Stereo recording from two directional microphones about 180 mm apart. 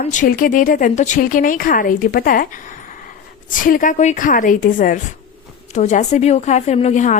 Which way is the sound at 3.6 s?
50° left (ahead or behind).